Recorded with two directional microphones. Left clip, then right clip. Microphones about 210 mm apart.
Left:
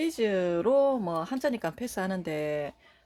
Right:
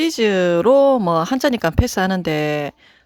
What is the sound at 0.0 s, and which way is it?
Speech, 40° right (ahead or behind).